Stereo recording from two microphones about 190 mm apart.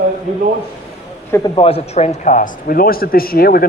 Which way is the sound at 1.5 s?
30° left (ahead or behind).